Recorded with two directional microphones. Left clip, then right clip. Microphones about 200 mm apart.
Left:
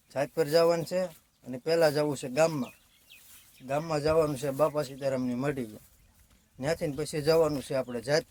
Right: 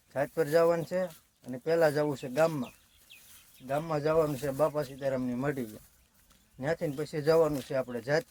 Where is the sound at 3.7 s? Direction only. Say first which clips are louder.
Left 2 dB; 10° left (ahead or behind).